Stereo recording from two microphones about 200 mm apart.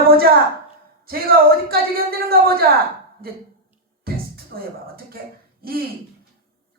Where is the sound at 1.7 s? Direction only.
50° right (ahead or behind).